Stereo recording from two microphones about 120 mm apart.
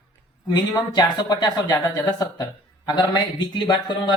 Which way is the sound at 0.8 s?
35° left (ahead or behind).